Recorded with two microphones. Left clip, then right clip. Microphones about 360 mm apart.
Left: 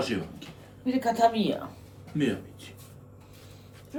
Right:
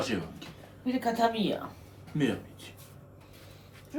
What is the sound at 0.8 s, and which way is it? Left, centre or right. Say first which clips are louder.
Speech: left 4 dB; centre.